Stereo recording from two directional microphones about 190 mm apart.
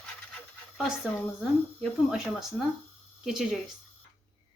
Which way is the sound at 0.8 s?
Centre (ahead or behind).